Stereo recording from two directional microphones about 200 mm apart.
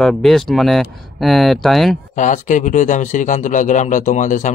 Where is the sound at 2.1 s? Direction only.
40° left (ahead or behind).